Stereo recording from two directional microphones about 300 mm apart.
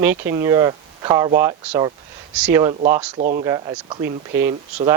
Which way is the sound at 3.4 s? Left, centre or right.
Centre.